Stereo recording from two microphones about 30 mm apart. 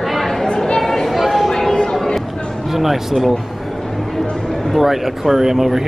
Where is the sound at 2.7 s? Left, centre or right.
Centre.